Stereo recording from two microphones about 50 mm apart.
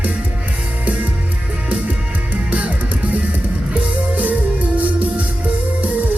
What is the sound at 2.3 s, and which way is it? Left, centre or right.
Music, right.